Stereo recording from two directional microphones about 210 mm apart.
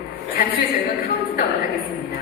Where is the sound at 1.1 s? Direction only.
50° left (ahead or behind).